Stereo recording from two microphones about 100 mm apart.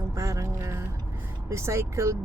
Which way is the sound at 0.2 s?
35° right (ahead or behind).